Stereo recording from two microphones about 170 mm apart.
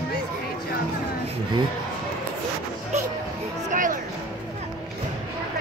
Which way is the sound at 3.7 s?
50° right (ahead or behind).